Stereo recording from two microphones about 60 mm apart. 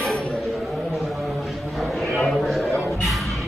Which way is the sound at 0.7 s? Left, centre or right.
Centre.